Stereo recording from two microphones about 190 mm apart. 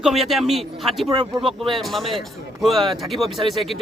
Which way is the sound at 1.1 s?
30° right (ahead or behind).